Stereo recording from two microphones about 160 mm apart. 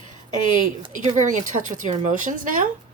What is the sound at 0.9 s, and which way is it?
Speech, 55° right (ahead or behind).